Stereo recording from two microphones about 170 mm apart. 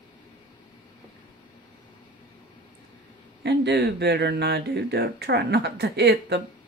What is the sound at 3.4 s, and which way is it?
Speech, 80° right.